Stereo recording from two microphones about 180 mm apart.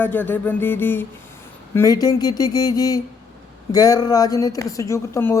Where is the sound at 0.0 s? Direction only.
10° left (ahead or behind).